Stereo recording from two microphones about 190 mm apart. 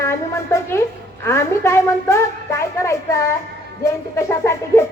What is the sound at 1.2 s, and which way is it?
A child's voice, 15° left (ahead or behind).